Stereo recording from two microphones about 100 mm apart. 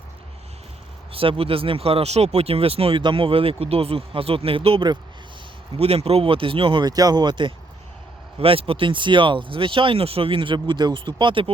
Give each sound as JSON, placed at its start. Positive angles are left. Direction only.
{"t": 1.1, "sound": "speech", "side_deg": -70}
{"t": 3.0, "sound": "speech", "side_deg": -55}
{"t": 5.7, "sound": "speech", "side_deg": -85}
{"t": 6.8, "sound": "speech", "side_deg": -40}
{"t": 8.4, "sound": "speech", "side_deg": -70}